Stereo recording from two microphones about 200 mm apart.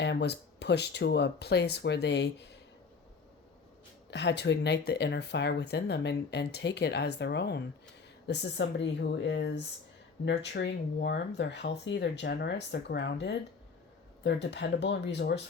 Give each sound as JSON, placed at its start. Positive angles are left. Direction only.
{"t": 0.0, "sound": "speech", "side_deg": 60}
{"t": 4.1, "sound": "speech", "side_deg": 55}